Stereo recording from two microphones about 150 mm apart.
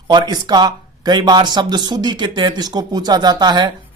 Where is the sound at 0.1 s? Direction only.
30° right (ahead or behind).